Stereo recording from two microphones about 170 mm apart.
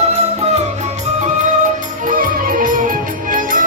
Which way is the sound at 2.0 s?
55° right (ahead or behind).